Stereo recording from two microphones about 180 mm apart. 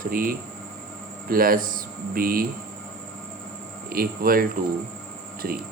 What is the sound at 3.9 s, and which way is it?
Speech, 55° right (ahead or behind).